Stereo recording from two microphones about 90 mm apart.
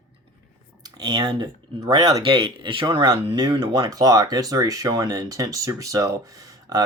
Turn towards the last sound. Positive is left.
turn(degrees=-40)  # may be behind; listen again after turning